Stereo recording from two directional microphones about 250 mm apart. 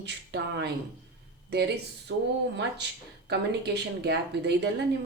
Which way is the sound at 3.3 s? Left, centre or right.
Right.